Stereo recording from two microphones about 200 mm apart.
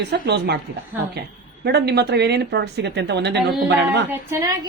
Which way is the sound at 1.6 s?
55° right (ahead or behind).